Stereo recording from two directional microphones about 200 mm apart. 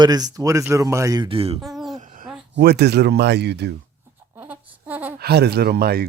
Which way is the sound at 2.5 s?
55° right (ahead or behind).